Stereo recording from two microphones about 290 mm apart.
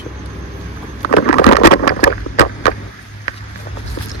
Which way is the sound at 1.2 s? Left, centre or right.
Left.